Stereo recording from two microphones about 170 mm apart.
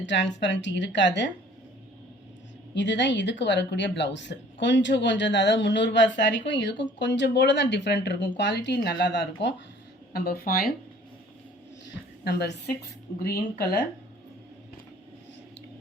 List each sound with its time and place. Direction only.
0.0 s speech: 90° left
2.7 s speech: 90° left
10.1 s a woman's voice: 65° left (ahead or behind)
12.2 s a woman's voice: 75° left (ahead or behind)